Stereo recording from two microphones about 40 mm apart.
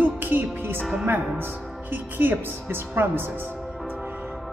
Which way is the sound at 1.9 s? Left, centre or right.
Right.